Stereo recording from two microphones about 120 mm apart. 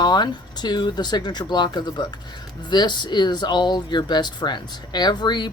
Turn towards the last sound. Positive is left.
turn(degrees=35)  # may be behind; listen again after turning